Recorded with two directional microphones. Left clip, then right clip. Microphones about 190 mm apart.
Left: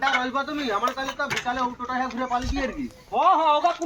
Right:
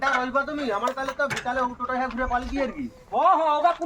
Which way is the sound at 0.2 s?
35° right (ahead or behind).